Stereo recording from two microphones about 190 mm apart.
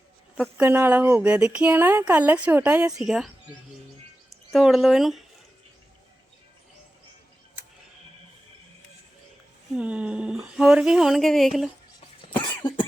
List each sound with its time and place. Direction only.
0.3 s speech: 10° right (ahead or behind)
4.5 s speech: centre (ahead or behind)
9.7 s speech: 5° right (ahead or behind)
11.9 s cough: 25° left (ahead or behind)